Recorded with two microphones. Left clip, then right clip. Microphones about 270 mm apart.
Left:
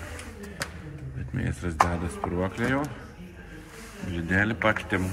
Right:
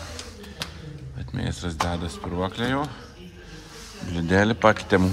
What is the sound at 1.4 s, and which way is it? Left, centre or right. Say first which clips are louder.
Speech: left 3 dB; centre.